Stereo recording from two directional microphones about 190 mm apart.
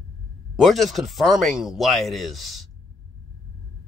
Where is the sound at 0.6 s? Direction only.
Centre (ahead or behind).